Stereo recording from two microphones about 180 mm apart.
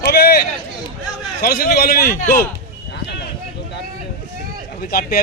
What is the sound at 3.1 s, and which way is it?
Vehicle, 75° left (ahead or behind).